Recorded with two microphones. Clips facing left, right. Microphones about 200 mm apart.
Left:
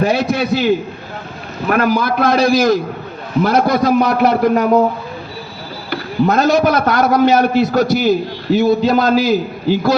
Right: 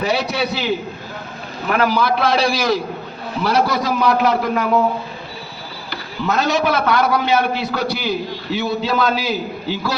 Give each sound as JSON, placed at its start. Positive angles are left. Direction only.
{"t": 0.0, "sound": "a man's voice", "side_deg": 50}
{"t": 1.7, "sound": "a man's voice", "side_deg": 50}
{"t": 5.9, "sound": "a man's voice", "side_deg": 50}